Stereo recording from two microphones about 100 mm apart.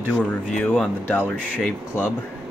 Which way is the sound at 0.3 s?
10° left (ahead or behind).